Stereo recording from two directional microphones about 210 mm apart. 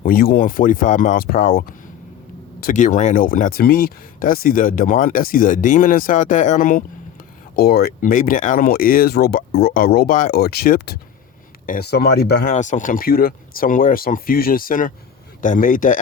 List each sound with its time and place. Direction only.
0.0 s speech: 45° left (ahead or behind)